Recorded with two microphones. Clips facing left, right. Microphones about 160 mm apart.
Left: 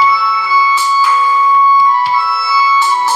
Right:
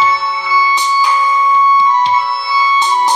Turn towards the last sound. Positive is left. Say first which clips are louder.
# even
turn(degrees=-20)  # may be behind; listen again after turning